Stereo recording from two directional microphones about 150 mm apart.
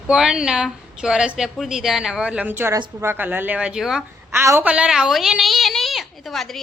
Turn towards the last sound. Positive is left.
turn(degrees=0)  # may be behind; listen again after turning